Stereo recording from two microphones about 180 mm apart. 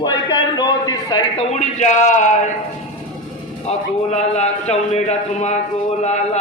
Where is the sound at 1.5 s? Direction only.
40° left (ahead or behind).